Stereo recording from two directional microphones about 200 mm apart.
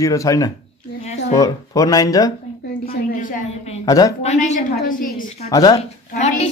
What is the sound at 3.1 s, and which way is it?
Speech, 40° left (ahead or behind).